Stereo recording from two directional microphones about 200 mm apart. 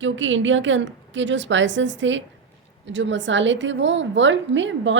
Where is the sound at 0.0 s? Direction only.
70° right (ahead or behind).